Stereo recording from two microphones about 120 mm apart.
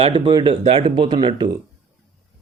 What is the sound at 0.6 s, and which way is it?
Speech, 50° right (ahead or behind).